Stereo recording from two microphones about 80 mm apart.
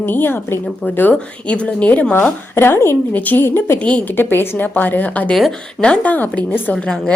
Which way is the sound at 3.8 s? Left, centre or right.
Centre.